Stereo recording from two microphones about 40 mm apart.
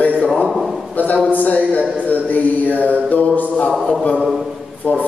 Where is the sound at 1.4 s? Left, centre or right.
Left.